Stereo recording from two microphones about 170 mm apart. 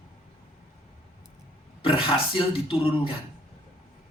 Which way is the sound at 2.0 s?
30° left (ahead or behind).